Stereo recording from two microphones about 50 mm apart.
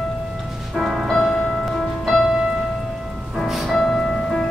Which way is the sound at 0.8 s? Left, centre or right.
Centre.